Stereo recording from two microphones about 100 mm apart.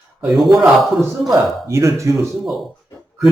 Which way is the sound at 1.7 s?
30° right (ahead or behind).